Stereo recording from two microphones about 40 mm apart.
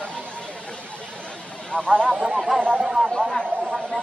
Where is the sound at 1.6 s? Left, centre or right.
Centre.